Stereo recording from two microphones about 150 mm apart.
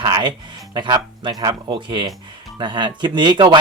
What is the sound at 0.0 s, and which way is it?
Speech, 25° right (ahead or behind).